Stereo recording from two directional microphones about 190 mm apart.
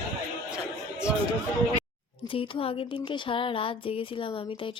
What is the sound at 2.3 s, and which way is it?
Speech, 30° left (ahead or behind).